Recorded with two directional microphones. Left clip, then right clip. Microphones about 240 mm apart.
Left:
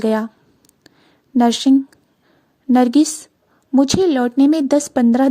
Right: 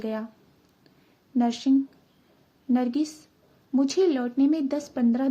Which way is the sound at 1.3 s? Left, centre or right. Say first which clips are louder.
Left 10 dB; left.